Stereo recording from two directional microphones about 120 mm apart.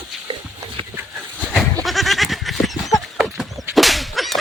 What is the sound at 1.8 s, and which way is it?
Goat, centre (ahead or behind).